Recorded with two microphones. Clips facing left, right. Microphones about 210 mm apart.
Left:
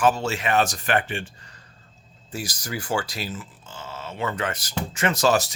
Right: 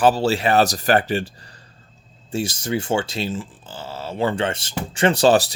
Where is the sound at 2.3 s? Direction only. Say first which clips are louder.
Right 8 dB; 25° right (ahead or behind).